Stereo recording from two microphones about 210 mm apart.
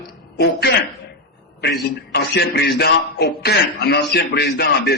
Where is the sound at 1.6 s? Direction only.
50° left (ahead or behind).